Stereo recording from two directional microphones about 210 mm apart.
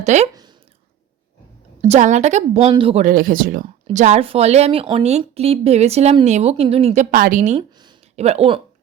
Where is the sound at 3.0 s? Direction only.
40° right (ahead or behind).